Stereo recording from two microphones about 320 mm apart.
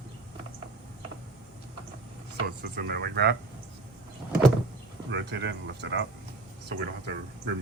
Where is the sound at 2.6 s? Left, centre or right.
Right.